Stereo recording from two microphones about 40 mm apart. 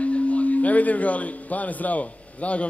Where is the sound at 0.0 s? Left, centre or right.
Left.